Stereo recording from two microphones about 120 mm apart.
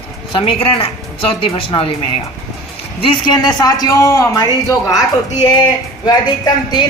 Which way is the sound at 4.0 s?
25° left (ahead or behind).